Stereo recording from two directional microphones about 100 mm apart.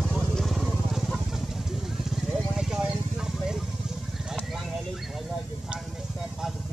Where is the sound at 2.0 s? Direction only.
5° right (ahead or behind).